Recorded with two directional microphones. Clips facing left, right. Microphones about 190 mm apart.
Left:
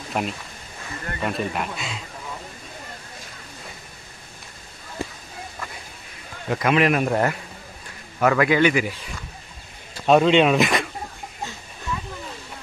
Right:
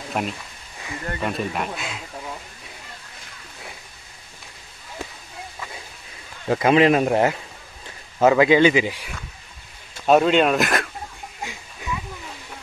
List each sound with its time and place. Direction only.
0.1 s speech: centre (ahead or behind)
6.5 s speech: 30° right (ahead or behind)
10.0 s speech: centre (ahead or behind)
11.4 s a sound: 10° right (ahead or behind)